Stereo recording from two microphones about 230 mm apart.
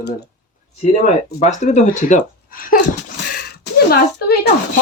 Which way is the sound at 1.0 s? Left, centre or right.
Left.